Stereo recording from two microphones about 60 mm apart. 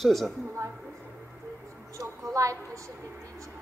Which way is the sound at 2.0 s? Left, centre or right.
Right.